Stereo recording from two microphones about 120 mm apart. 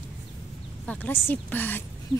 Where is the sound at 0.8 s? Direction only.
15° left (ahead or behind).